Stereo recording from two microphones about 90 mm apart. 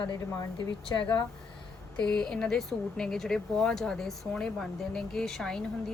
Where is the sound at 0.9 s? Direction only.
60° left (ahead or behind).